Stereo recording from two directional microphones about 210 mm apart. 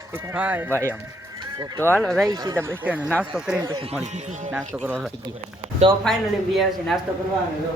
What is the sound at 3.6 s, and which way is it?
Speech, 20° right (ahead or behind).